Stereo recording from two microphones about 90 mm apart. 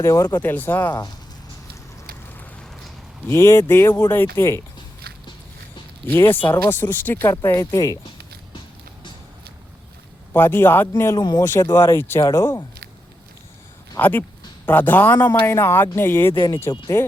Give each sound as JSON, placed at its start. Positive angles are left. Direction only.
{"t": 0.0, "sound": "speech", "side_deg": 35}
{"t": 3.2, "sound": "speech", "side_deg": 30}
{"t": 6.1, "sound": "speech", "side_deg": 25}
{"t": 10.3, "sound": "speech", "side_deg": 25}
{"t": 11.2, "sound": "speech", "side_deg": 45}
{"t": 11.7, "sound": "speech", "side_deg": 30}
{"t": 14.0, "sound": "speech", "side_deg": 25}
{"t": 16.7, "sound": "speech", "side_deg": 45}